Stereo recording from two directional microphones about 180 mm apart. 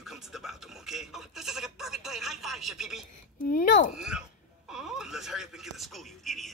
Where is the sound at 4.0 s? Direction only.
5° right (ahead or behind).